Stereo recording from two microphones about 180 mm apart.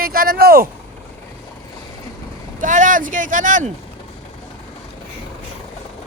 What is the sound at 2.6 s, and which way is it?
Speech, 45° right (ahead or behind).